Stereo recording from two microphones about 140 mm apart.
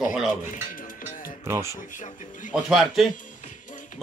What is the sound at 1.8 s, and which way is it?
Speech, 65° left (ahead or behind).